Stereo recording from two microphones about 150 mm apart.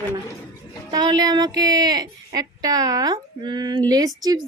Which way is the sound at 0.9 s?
25° right (ahead or behind).